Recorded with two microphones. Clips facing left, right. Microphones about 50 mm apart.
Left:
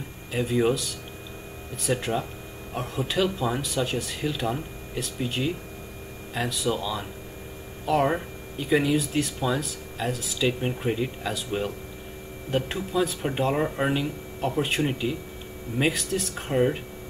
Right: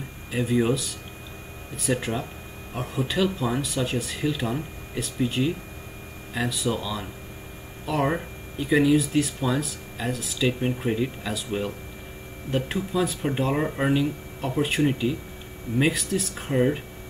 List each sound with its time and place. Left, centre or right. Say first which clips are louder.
0.3 s speech: even; centre